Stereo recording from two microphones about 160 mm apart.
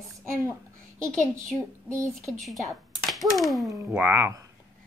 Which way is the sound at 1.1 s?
5° left (ahead or behind).